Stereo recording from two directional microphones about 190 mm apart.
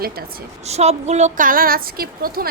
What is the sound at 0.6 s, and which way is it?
A woman's voice, 35° right (ahead or behind).